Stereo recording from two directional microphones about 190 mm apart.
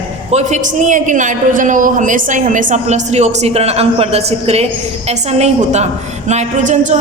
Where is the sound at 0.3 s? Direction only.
35° right (ahead or behind).